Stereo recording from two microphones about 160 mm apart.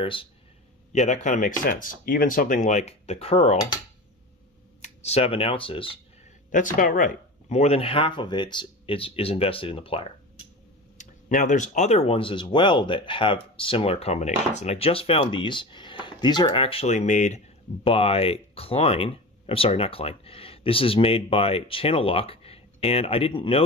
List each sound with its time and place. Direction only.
0.0 s speech: 35° left (ahead or behind)
0.9 s speech: 50° left (ahead or behind)
4.8 s speech: 40° left (ahead or behind)
6.5 s speech: 55° left (ahead or behind); by 10.0 s 35° left (ahead or behind)
11.0 s speech: 50° left (ahead or behind)
17.8 s speech: 35° left (ahead or behind)